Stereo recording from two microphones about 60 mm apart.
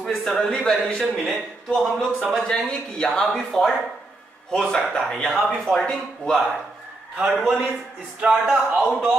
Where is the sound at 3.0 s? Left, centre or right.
Centre.